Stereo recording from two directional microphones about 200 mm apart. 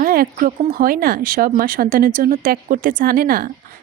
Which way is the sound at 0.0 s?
45° right (ahead or behind).